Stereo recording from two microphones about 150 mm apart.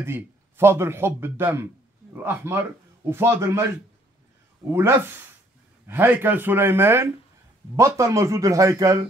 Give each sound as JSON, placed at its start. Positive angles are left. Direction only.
{"t": 0.0, "sound": "speech", "side_deg": -15}
{"t": 4.6, "sound": "speech", "side_deg": -15}